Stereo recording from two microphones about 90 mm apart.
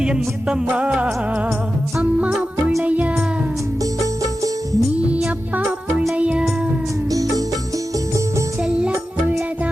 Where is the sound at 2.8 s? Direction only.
15° right (ahead or behind).